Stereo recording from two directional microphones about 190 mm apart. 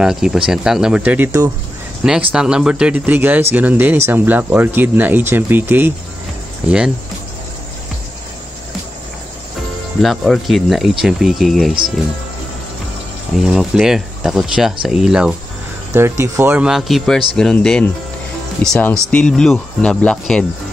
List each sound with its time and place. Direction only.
0.0 s speech: 5° right (ahead or behind)
2.0 s speech: 5° right (ahead or behind)
10.0 s speech: centre (ahead or behind)
13.4 s speech: centre (ahead or behind)
15.9 s speech: 15° right (ahead or behind); by 20.4 s 5° left (ahead or behind)